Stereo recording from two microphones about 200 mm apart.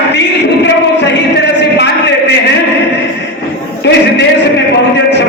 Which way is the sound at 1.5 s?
60° left (ahead or behind).